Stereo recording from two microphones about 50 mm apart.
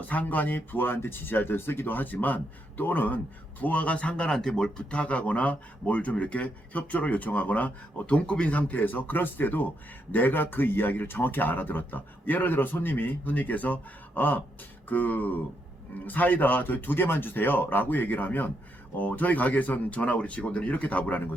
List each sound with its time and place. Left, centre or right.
0.0 s speech: left; by 4.7 s centre
4.9 s speech: left